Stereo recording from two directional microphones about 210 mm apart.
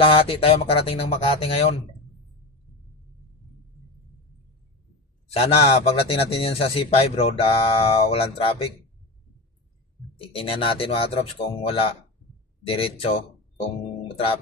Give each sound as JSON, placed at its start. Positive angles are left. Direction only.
{"t": 0.0, "sound": "a man's voice", "side_deg": 25}
{"t": 5.3, "sound": "a man's voice", "side_deg": 25}
{"t": 10.3, "sound": "a man's voice", "side_deg": 25}